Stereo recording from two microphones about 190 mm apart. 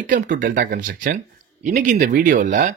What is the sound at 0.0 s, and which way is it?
Speech, 45° right (ahead or behind).